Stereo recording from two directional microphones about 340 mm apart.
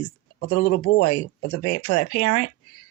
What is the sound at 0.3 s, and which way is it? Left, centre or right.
Speech, left.